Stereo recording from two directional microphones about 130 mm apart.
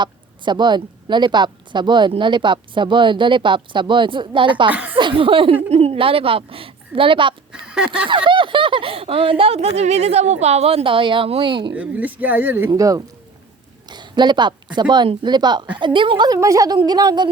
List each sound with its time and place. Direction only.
0.0 s a woman's voice: 35° right (ahead or behind)
4.7 s speech: 10° right (ahead or behind)
4.9 s speech: 40° right (ahead or behind)
7.6 s a sound: 5° right (ahead or behind)
8.0 s speech: 40° right (ahead or behind)
11.7 s speech: 10° right (ahead or behind)
12.7 s a woman's voice: 25° right (ahead or behind)